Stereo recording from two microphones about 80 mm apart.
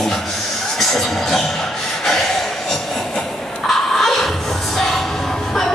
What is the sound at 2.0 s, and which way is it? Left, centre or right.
Snort, centre.